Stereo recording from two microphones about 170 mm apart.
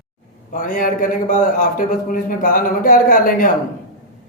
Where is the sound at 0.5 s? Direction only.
55° left (ahead or behind).